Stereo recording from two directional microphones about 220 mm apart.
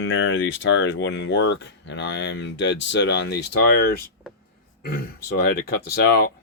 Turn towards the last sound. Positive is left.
turn(degrees=45)  # may be behind; listen again after turning